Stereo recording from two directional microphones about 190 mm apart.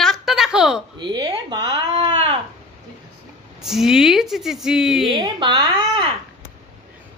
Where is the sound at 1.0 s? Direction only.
25° right (ahead or behind).